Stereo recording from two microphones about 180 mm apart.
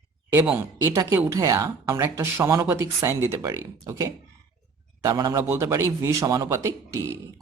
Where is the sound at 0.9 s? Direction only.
15° right (ahead or behind).